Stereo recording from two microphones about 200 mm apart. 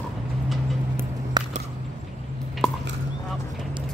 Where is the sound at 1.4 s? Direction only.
20° right (ahead or behind).